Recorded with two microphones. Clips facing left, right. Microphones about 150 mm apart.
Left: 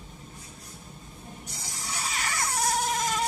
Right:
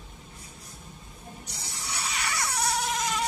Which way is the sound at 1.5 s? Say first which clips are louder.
Even; 45° left (ahead or behind).